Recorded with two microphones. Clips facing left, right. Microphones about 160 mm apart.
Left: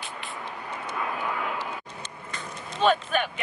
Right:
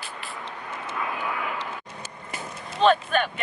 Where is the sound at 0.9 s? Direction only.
Centre (ahead or behind).